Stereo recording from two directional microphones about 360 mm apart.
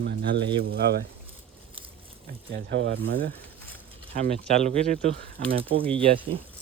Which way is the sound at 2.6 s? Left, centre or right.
Right.